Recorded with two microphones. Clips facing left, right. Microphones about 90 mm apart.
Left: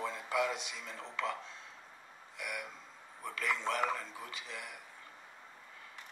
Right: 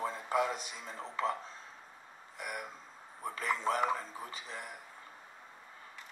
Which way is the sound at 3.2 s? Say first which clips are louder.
Right 2 dB; 35° right (ahead or behind).